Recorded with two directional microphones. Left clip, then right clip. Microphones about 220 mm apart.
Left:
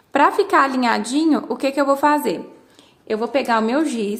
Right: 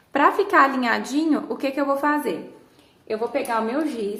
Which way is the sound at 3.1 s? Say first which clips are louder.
Left 5 dB; 50° left (ahead or behind).